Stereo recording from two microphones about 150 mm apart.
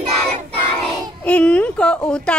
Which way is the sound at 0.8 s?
5° left (ahead or behind).